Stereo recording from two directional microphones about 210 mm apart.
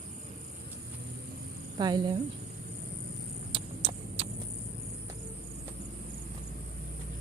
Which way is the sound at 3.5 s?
25° right (ahead or behind).